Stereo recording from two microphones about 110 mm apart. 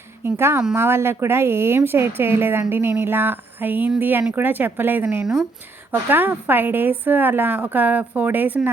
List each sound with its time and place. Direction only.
0.3 s a woman's voice: 20° right (ahead or behind)